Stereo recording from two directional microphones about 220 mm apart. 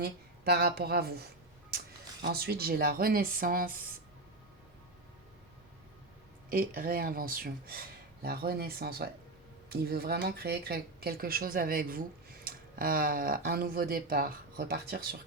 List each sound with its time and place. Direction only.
0.0 s speech: 45° right (ahead or behind)
6.5 s speech: 40° right (ahead or behind)